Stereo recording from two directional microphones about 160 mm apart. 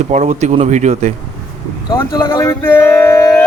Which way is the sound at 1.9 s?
20° left (ahead or behind).